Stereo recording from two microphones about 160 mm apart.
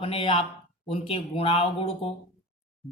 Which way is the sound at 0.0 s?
35° left (ahead or behind).